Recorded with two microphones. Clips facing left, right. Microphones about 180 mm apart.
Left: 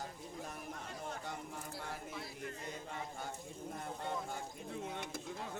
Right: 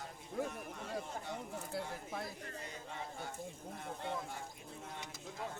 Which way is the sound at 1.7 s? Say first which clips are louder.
Right 5 dB; 55° right (ahead or behind).